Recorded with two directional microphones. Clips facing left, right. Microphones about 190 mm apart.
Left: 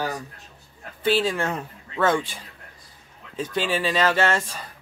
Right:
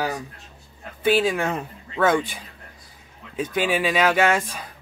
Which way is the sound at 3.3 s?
15° right (ahead or behind).